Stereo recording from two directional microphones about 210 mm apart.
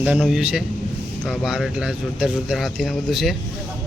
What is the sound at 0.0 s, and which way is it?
Speech, 5° right (ahead or behind).